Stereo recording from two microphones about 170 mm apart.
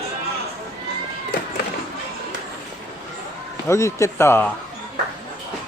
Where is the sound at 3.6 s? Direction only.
15° left (ahead or behind).